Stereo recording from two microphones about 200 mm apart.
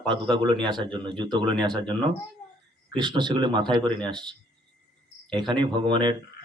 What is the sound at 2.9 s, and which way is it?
A man's voice, 25° right (ahead or behind).